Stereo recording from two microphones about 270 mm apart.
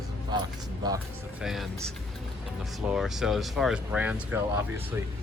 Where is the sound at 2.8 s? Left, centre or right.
Centre.